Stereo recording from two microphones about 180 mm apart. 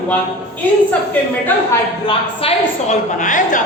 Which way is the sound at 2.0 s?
30° left (ahead or behind).